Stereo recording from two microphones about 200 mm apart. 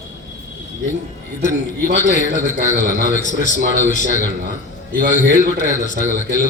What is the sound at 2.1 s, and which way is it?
A man's voice, 40° left (ahead or behind).